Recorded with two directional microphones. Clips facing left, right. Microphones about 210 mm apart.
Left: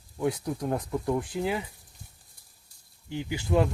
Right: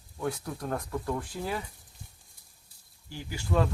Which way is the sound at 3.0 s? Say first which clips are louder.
Left 5 dB; 20° left (ahead or behind).